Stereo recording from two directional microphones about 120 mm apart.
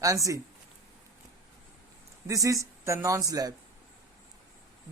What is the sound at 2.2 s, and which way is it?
Speech, 25° right (ahead or behind).